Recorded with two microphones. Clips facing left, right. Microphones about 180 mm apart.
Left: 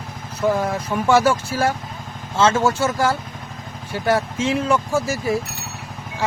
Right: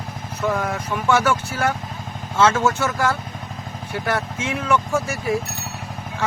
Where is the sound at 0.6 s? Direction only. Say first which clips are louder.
Left 3 dB; 30° left (ahead or behind).